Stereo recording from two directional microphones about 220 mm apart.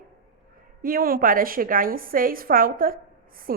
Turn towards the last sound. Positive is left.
turn(degrees=-40)  # may be behind; listen again after turning